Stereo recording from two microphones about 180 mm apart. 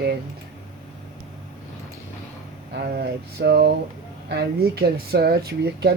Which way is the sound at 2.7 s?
60° right (ahead or behind).